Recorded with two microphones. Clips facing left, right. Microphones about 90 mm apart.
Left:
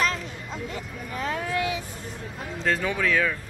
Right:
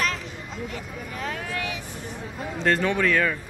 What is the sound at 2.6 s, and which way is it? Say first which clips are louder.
Speech: right 3 dB; 5° left (ahead or behind).